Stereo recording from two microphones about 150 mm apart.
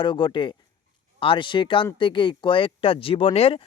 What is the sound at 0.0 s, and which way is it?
A man's voice, 30° left (ahead or behind).